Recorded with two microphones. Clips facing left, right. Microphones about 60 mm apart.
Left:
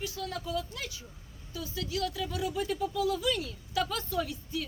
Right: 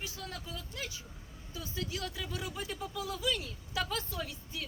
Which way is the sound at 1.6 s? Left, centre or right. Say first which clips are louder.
Left 5 dB; right.